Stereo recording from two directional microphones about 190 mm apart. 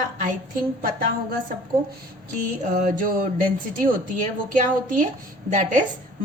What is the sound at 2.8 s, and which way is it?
A woman's voice, 45° right (ahead or behind).